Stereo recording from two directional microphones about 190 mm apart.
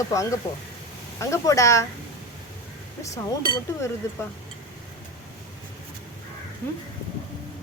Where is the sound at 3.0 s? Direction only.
15° left (ahead or behind).